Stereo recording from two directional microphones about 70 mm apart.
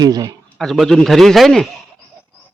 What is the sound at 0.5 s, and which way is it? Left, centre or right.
A man's voice, centre.